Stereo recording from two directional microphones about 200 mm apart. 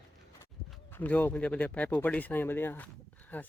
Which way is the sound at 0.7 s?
10° left (ahead or behind).